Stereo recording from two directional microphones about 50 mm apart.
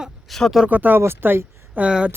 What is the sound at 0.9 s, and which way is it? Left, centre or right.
Speech, right.